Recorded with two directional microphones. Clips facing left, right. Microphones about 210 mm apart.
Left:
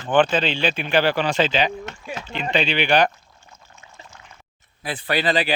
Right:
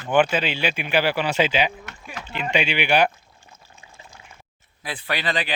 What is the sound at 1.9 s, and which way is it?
Rowboat, 25° left (ahead or behind).